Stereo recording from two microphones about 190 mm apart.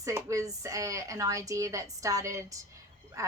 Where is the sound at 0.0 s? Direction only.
15° right (ahead or behind).